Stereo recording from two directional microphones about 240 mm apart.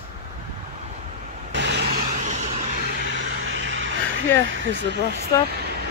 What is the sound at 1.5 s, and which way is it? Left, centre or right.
Vehicle, right.